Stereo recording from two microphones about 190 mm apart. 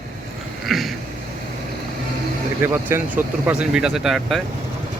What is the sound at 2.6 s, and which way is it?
Speech, 10° right (ahead or behind).